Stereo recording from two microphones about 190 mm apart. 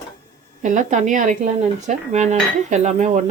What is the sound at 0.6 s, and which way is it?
Cutlery, 40° right (ahead or behind).